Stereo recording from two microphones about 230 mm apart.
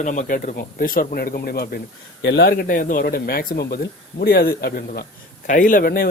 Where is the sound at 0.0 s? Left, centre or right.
Left.